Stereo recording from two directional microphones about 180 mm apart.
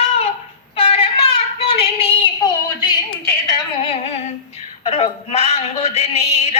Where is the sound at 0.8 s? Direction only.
30° left (ahead or behind).